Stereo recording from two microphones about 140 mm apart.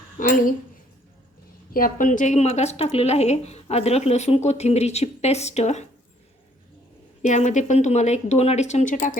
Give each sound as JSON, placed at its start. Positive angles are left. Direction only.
{"t": 0.2, "sound": "speech", "side_deg": 75}
{"t": 1.7, "sound": "speech", "side_deg": 80}
{"t": 7.2, "sound": "speech", "side_deg": 60}